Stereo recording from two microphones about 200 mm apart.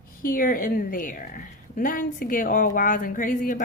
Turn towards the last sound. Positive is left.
turn(degrees=40)  # may be behind; listen again after turning